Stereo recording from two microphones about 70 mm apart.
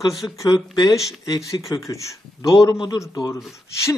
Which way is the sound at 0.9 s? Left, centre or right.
Left.